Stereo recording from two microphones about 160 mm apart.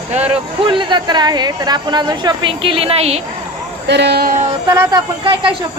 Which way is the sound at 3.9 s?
90° right.